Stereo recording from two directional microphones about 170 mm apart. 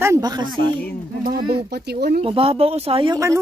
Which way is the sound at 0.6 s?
65° left (ahead or behind).